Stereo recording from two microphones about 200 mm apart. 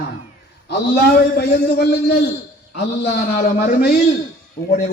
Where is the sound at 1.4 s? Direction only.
55° left (ahead or behind).